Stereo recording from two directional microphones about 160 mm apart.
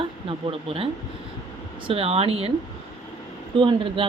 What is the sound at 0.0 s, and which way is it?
Speech, 35° right (ahead or behind).